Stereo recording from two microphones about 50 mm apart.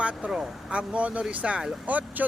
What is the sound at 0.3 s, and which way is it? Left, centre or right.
Speech, centre.